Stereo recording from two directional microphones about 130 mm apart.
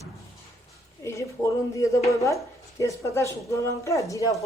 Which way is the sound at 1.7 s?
25° left (ahead or behind).